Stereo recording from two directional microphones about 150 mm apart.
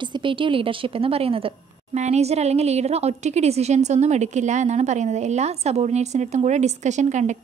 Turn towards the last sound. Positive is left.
turn(degrees=-50)  # may be behind; listen again after turning